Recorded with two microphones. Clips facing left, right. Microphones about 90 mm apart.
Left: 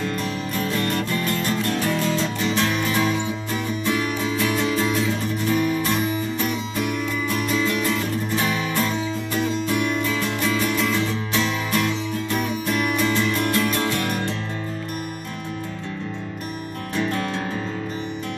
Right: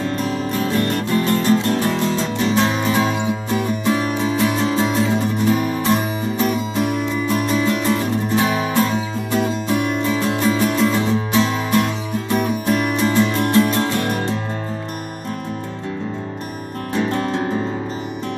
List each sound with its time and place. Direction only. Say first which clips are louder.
0.7 s music: right 6 dB; 30° right (ahead or behind)
16.9 s music: right 4 dB; 30° right (ahead or behind)